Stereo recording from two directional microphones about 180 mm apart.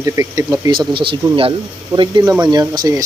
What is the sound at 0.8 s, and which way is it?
Speech, 30° right (ahead or behind).